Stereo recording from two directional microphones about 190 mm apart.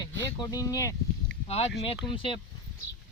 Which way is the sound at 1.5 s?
35° left (ahead or behind).